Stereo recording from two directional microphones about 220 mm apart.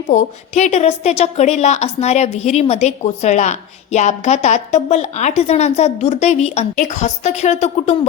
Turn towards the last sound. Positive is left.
turn(degrees=30)  # may be behind; listen again after turning